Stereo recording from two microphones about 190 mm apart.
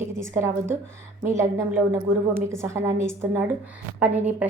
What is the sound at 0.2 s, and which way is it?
A woman's voice, 15° right (ahead or behind).